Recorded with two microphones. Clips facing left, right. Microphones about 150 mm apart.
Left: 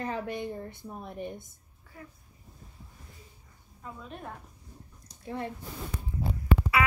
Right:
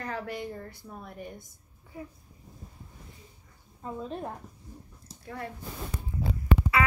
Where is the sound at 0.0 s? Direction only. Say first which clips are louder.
Left 2 dB; 20° left (ahead or behind).